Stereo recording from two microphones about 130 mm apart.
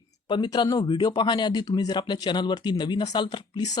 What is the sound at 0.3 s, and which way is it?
Speech, 35° left (ahead or behind).